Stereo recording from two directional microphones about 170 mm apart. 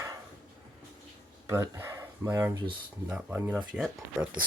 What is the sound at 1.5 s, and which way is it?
Speech, 15° right (ahead or behind).